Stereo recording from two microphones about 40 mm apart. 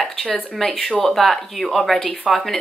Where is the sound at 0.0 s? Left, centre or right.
Centre.